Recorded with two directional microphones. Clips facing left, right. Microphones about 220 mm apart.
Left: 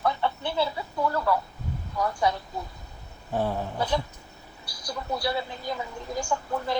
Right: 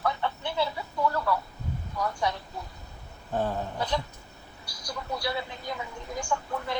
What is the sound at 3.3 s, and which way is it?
Speech, 10° left (ahead or behind).